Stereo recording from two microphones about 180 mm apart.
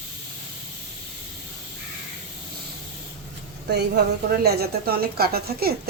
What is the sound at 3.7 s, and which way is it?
A woman's voice, 65° right (ahead or behind).